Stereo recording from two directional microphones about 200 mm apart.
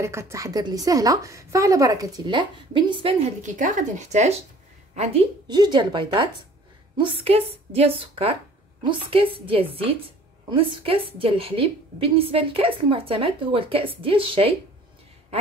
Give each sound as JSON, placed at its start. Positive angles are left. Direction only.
{"t": 0.0, "sound": "a woman's voice", "side_deg": -15}